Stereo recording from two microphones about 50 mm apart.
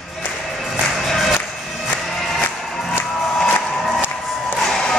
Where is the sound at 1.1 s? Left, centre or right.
Centre.